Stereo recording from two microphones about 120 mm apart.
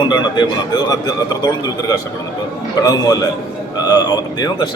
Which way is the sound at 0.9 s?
35° left (ahead or behind).